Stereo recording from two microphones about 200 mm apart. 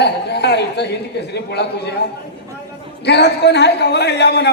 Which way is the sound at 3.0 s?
55° left (ahead or behind).